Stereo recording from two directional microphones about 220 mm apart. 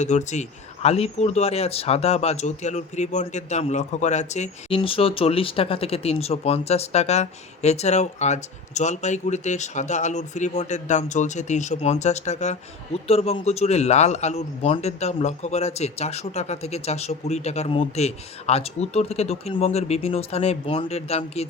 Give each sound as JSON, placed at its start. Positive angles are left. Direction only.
{"t": 0.0, "sound": "speech", "side_deg": 30}